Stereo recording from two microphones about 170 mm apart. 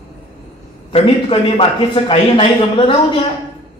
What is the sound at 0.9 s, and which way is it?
A man's voice, 30° left (ahead or behind).